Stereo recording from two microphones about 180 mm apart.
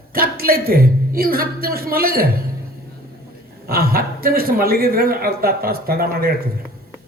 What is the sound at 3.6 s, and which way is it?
A man's voice, 55° right (ahead or behind).